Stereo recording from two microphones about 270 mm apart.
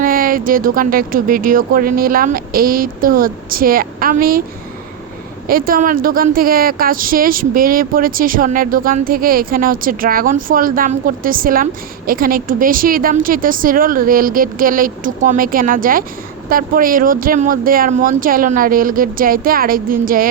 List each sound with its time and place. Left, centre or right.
0.0 s speech: right
5.5 s speech: right